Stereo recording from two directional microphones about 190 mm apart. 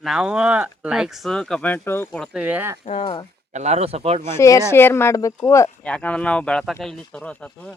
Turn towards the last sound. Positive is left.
turn(degrees=5)  # may be behind; listen again after turning